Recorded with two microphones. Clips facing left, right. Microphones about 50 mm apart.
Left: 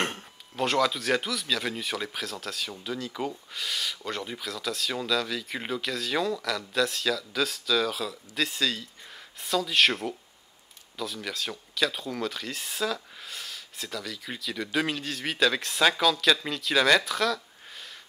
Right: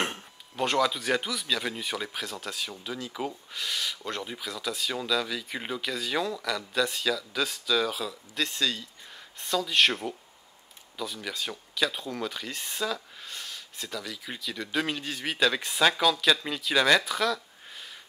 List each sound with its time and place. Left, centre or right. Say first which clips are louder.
0.0 s speech: left 1 dB; centre